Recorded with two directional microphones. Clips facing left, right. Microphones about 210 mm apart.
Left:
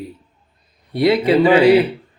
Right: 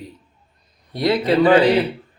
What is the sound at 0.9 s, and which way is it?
Speech, 10° left (ahead or behind).